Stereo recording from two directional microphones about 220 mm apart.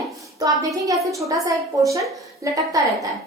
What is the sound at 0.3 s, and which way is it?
A woman's voice, 15° right (ahead or behind).